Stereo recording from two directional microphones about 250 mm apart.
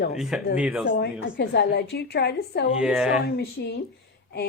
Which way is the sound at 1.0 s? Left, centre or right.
Left.